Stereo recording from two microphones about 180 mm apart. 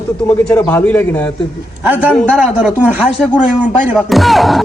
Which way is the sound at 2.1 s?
Centre (ahead or behind).